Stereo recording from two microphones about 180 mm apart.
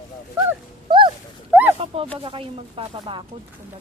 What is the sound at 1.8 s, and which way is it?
Speech, 30° right (ahead or behind).